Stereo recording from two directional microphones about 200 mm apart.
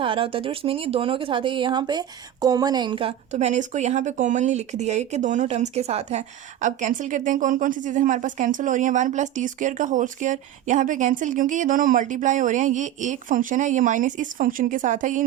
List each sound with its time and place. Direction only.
0.0 s speech: 25° right (ahead or behind)